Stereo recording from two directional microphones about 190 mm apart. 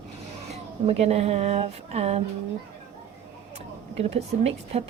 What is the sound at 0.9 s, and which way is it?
Speech, 35° right (ahead or behind).